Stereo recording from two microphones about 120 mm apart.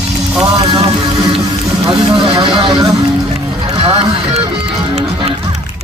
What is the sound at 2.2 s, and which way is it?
Speech, 50° right (ahead or behind).